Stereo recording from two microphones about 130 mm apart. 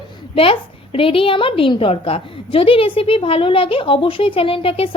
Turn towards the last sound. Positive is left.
turn(degrees=45)  # may be behind; listen again after turning